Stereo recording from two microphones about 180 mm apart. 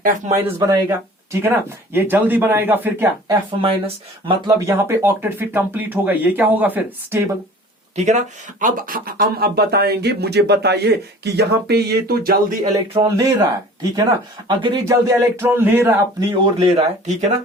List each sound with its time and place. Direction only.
0.3 s speech: 15° right (ahead or behind)
3.6 s speech: 30° right (ahead or behind)
4.4 s speech: 15° right (ahead or behind)
7.9 s speech: 40° right (ahead or behind)
8.6 s speech: 50° right (ahead or behind)
13.0 s speech: 20° right (ahead or behind)
16.3 s speech: 35° right (ahead or behind)